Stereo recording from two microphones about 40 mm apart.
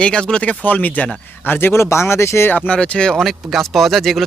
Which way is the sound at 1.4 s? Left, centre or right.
Left.